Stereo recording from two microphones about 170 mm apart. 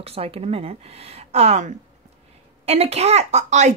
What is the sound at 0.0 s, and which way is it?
A woman's voice, 35° right (ahead or behind).